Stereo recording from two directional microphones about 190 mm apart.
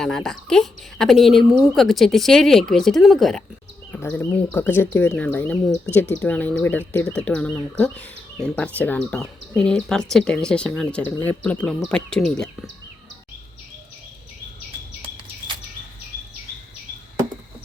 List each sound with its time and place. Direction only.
0.0 s a woman's voice: centre (ahead or behind)